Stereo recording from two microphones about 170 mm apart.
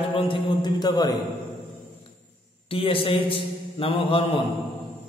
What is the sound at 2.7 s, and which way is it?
A man's voice, 30° left (ahead or behind).